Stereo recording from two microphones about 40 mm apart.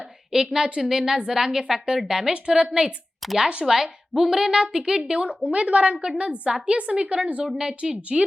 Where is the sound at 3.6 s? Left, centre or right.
Centre.